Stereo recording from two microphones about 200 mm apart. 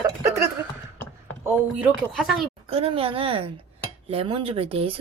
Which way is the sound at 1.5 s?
5° right (ahead or behind).